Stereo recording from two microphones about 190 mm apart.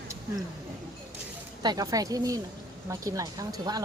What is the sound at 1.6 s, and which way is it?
Speech, 20° right (ahead or behind).